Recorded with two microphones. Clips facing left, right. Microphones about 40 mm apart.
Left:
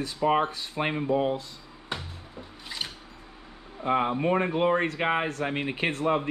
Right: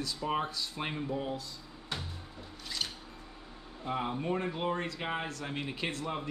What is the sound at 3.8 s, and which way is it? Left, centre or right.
Speech, left.